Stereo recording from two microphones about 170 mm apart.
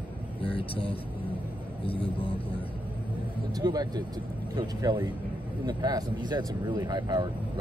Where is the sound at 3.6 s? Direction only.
25° right (ahead or behind).